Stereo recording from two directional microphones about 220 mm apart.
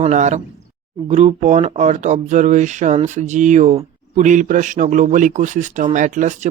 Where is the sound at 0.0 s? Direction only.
30° right (ahead or behind).